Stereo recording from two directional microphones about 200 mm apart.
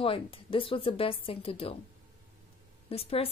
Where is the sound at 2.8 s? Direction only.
30° left (ahead or behind).